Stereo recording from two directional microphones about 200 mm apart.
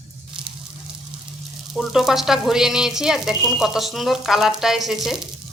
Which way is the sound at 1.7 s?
Centre (ahead or behind).